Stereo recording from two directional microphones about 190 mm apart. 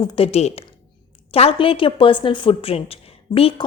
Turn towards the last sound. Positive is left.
turn(degrees=30)  # may be behind; listen again after turning